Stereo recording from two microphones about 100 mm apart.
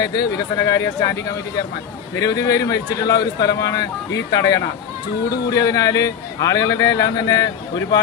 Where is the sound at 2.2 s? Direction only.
35° left (ahead or behind).